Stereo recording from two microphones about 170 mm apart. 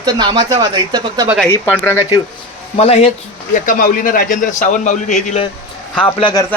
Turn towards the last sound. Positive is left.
turn(degrees=30)  # may be behind; listen again after turning